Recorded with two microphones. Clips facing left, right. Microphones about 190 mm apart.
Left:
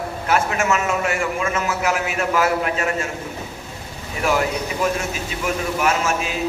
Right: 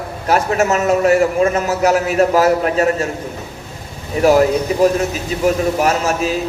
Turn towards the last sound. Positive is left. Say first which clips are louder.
# right 5 dB
turn(degrees=-35)  # may be behind; listen again after turning